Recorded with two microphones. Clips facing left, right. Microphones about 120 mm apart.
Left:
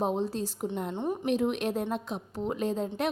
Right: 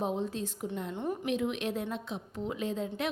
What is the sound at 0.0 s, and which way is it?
A woman's voice, 35° left (ahead or behind).